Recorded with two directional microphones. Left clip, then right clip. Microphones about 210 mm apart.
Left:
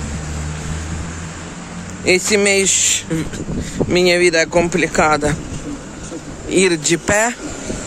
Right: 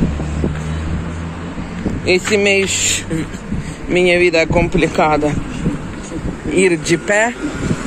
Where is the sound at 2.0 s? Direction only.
25° left (ahead or behind).